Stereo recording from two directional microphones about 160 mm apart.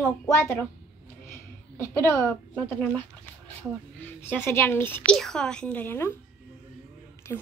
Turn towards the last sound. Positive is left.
turn(degrees=15)  # may be behind; listen again after turning